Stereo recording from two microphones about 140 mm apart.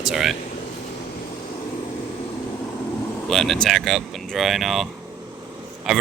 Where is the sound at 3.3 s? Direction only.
5° left (ahead or behind).